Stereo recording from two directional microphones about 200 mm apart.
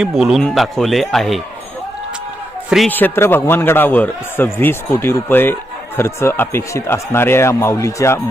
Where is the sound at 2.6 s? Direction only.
Centre (ahead or behind).